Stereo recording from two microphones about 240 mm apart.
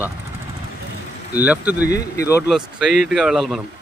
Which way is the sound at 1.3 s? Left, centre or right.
Centre.